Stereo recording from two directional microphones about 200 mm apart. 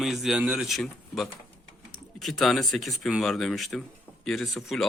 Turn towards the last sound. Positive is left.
turn(degrees=0)  # may be behind; listen again after turning